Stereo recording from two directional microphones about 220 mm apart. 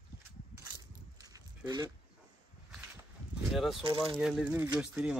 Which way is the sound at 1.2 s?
15° right (ahead or behind).